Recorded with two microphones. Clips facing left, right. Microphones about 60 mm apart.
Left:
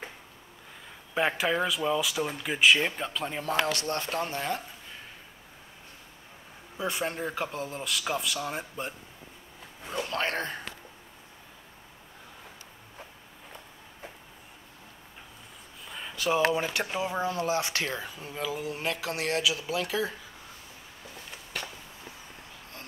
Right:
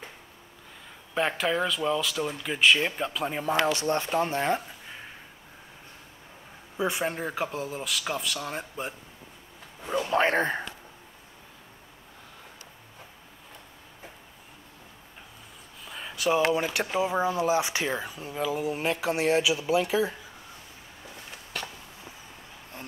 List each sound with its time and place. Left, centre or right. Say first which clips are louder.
1.1 s speech: even; centre
3.6 s speech: right 4 dB; right
6.8 s speech: right 3 dB; centre
7.1 s speech: right 2 dB; centre
10.0 s speech: right 8 dB; right
15.8 s a sound: right 3 dB; centre
16.9 s speech: right 7 dB; right
18.6 s speech: right 4 dB; centre